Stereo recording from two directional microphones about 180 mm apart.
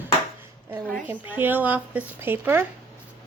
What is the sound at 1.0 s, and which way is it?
Speech, 10° right (ahead or behind).